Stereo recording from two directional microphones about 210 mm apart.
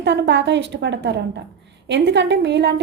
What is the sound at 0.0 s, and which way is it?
A woman's voice, 55° right (ahead or behind).